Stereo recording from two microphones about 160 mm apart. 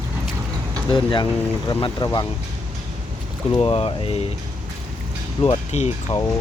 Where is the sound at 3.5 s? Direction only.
35° left (ahead or behind).